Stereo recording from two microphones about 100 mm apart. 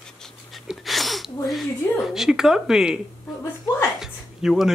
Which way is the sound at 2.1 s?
5° right (ahead or behind).